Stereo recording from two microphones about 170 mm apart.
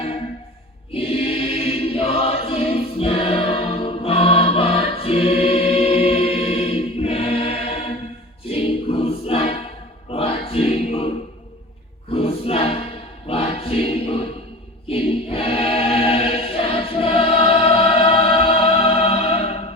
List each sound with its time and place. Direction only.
0.9 s choir: 35° left (ahead or behind)
12.1 s music: 35° left (ahead or behind)
13.2 s choir: 35° left (ahead or behind)